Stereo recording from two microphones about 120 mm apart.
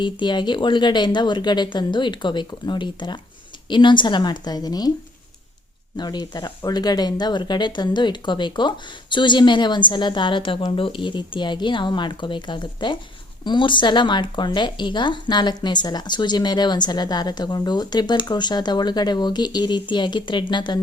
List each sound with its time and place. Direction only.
0.0 s speech: 40° left (ahead or behind)
6.0 s speech: 35° left (ahead or behind)